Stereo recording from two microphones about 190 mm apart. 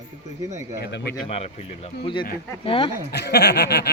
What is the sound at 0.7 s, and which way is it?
Speech, 60° left (ahead or behind).